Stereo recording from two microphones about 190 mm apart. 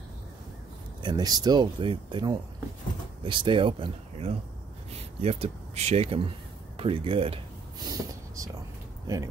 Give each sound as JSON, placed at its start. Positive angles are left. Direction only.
{"t": 1.0, "sound": "speech", "side_deg": -20}